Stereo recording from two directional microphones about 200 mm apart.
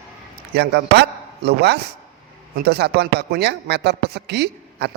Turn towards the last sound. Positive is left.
turn(degrees=-55)  # may be behind; listen again after turning